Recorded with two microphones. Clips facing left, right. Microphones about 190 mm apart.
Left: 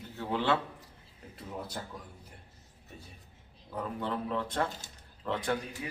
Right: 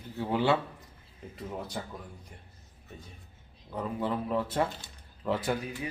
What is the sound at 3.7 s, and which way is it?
Speech, 5° right (ahead or behind).